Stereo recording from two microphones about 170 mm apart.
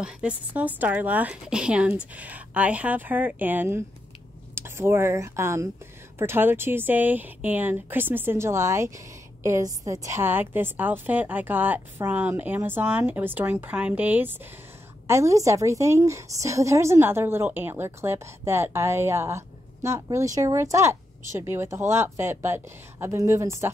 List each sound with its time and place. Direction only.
0.0 s a woman's voice: 5° right (ahead or behind)